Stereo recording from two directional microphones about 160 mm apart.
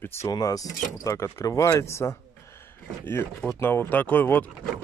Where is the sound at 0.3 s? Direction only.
25° left (ahead or behind).